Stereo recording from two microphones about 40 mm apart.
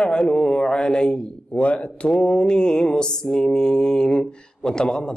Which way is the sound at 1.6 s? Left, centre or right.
Left.